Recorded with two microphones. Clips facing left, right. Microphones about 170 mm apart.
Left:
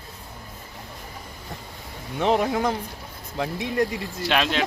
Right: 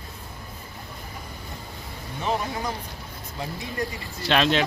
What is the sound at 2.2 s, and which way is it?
Speech, 80° left.